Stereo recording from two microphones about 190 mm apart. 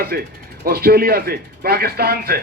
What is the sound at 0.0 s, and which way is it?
A man's voice, 55° right (ahead or behind).